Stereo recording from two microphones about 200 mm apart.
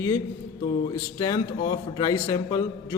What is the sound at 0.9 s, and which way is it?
A man's voice, 20° left (ahead or behind).